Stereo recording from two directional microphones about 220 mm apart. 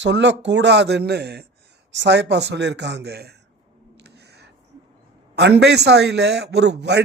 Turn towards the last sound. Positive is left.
turn(degrees=-50)  # may be behind; listen again after turning